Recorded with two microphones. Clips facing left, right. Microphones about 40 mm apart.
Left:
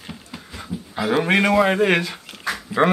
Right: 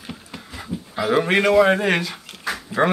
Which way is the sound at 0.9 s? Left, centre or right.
Centre.